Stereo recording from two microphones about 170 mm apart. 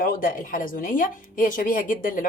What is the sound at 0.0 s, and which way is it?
A woman's voice, 55° left (ahead or behind).